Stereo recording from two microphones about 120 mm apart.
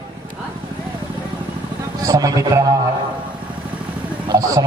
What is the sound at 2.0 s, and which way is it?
Speech, 30° right (ahead or behind).